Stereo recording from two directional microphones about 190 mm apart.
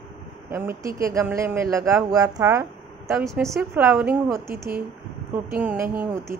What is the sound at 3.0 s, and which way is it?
A woman's voice, 5° right (ahead or behind).